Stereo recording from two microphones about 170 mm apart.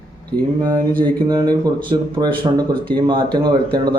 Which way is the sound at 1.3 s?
25° right (ahead or behind).